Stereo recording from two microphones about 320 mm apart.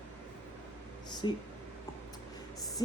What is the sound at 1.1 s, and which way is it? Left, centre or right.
Speech, centre.